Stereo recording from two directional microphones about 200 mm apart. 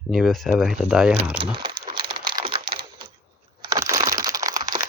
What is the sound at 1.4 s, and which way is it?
Crumpling, 25° right (ahead or behind).